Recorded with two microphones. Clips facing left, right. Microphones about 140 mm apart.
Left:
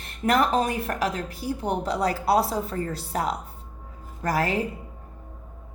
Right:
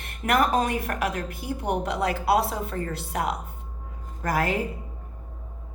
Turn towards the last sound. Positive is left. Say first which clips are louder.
# left 1 dB
turn(degrees=35)  # may be behind; listen again after turning